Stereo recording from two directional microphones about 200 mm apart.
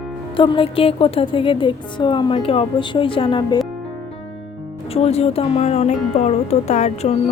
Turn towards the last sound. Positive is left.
turn(degrees=35)  # may be behind; listen again after turning